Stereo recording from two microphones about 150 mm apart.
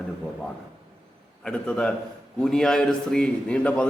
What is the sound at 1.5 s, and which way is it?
A man's voice, 5° left (ahead or behind).